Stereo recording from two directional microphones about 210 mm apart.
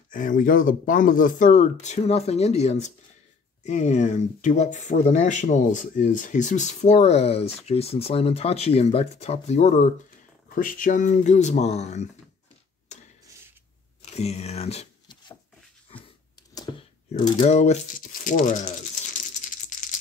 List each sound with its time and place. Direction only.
0.1 s speech: 40° left (ahead or behind)
14.1 s a sound: 30° left (ahead or behind)
17.1 s rattle: 30° left (ahead or behind)